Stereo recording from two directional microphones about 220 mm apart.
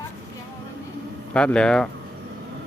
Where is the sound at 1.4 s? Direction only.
5° left (ahead or behind).